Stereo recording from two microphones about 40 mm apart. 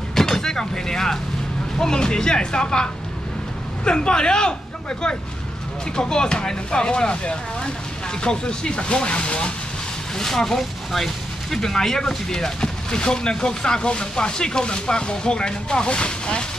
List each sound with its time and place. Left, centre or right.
0.1 s vehicle: centre
1.8 s speech: centre
10.1 s speech: centre